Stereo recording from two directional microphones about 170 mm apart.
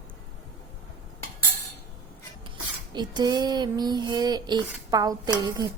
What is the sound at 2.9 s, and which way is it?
Child singing, 25° right (ahead or behind).